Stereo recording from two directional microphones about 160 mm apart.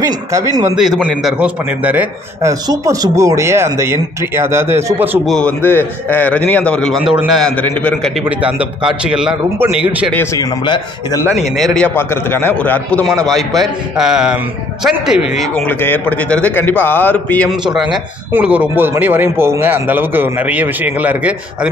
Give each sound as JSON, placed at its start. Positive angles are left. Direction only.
{"t": 0.0, "sound": "a man's voice", "side_deg": -20}
{"t": 0.7, "sound": "a man's voice", "side_deg": 0}
{"t": 2.6, "sound": "a man's voice", "side_deg": -25}
{"t": 5.2, "sound": "a man's voice", "side_deg": 5}
{"t": 8.2, "sound": "a man's voice", "side_deg": -10}
{"t": 10.1, "sound": "a man's voice", "side_deg": 20}
{"t": 11.3, "sound": "a man's voice", "side_deg": 0}
{"t": 15.6, "sound": "a man's voice", "side_deg": 10}
{"t": 18.3, "sound": "a man's voice", "side_deg": -10}